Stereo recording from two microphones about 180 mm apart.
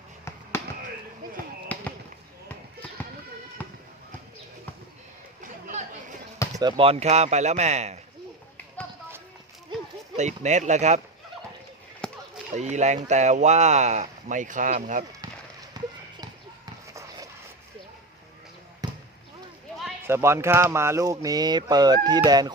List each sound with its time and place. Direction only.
1.6 s basketball bounce: 10° left (ahead or behind)
3.6 s a sound: 10° left (ahead or behind)
5.4 s chatter: 45° right (ahead or behind)
6.6 s speech: 25° right (ahead or behind)
10.2 s speech: 40° right (ahead or behind)
12.0 s basketball bounce: 5° left (ahead or behind)
12.5 s speech: 40° right (ahead or behind)
15.7 s clip-clop: 20° right (ahead or behind)
18.8 s basketball bounce: 20° right (ahead or behind)
20.1 s speech: 15° right (ahead or behind)